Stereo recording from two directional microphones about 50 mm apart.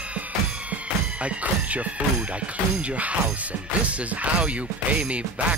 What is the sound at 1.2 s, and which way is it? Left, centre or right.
Music, right.